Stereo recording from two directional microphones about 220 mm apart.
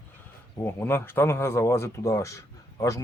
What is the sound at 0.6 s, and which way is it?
Speech, 10° left (ahead or behind).